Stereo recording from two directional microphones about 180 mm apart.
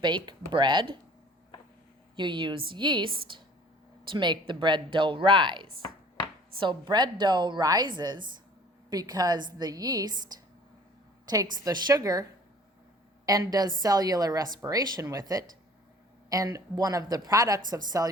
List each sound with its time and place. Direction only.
0.3 s a woman's voice: 25° right (ahead or behind)
2.1 s a woman's voice: 25° right (ahead or behind)
13.2 s a woman's voice: 20° right (ahead or behind)